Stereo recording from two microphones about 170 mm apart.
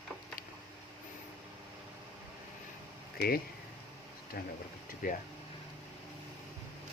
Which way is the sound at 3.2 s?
65° left (ahead or behind).